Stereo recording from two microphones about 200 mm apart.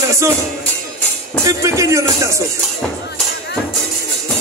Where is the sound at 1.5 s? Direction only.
15° right (ahead or behind).